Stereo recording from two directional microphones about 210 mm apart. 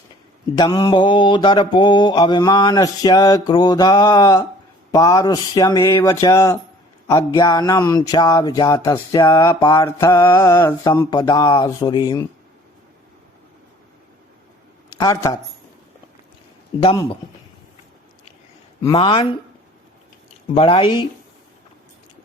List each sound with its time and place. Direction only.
0.5 s mantra: 20° left (ahead or behind)
4.9 s a sound: 15° left (ahead or behind)
14.9 s speech: 15° left (ahead or behind)
16.8 s mantra: 20° left (ahead or behind)
18.9 s mantra: 25° left (ahead or behind)
20.5 s mantra: 25° left (ahead or behind)